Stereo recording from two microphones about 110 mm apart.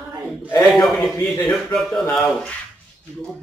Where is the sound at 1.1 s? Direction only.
20° left (ahead or behind).